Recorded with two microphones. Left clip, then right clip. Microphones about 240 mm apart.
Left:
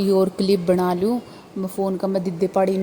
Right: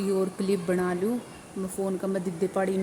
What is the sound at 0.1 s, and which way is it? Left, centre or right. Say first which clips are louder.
Speech: left 8 dB; centre.